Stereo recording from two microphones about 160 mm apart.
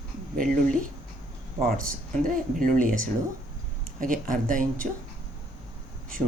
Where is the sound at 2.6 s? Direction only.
60° right (ahead or behind).